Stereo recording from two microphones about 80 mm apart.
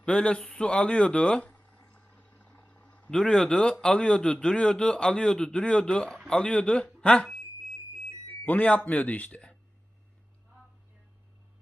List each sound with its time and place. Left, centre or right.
0.0 s a sound: centre
3.1 s a man's voice: centre
8.5 s a man's voice: centre